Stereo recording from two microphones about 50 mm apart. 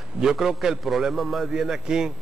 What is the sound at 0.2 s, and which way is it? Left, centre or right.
A man's voice, centre.